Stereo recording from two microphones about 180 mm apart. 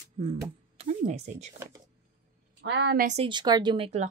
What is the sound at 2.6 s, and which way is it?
Speech, 70° right (ahead or behind).